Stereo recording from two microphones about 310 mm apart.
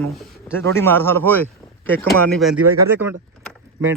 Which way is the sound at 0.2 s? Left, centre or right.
Centre.